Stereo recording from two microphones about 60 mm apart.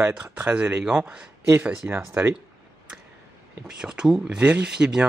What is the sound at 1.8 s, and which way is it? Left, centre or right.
Speech, right.